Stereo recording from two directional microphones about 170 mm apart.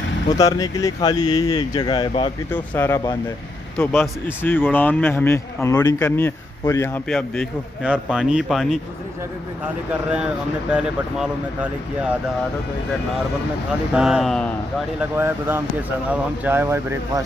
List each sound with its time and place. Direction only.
0.3 s speech: 20° left (ahead or behind)
2.5 s speech: 10° left (ahead or behind)
7.1 s speech: 5° left (ahead or behind)
9.8 s speech: 5° right (ahead or behind)
13.9 s speech: 5° right (ahead or behind)
15.0 s speech: 10° right (ahead or behind)